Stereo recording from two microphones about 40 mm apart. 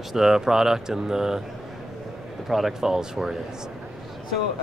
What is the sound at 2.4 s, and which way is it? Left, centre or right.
Speech, centre.